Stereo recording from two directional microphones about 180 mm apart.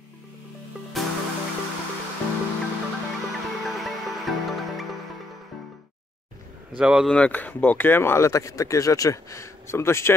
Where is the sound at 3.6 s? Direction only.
Centre (ahead or behind).